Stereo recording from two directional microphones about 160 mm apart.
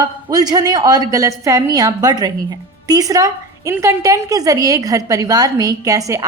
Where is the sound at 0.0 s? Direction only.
25° right (ahead or behind).